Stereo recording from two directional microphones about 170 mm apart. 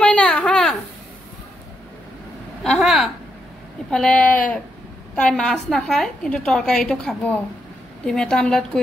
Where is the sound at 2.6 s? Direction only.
Centre (ahead or behind).